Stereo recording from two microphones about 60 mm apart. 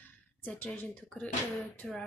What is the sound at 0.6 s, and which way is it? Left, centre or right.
Speech, centre.